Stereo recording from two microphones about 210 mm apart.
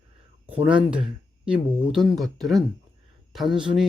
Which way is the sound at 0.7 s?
25° right (ahead or behind).